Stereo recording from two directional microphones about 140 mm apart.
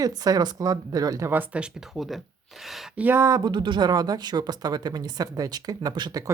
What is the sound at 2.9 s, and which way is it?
Speech, 15° right (ahead or behind).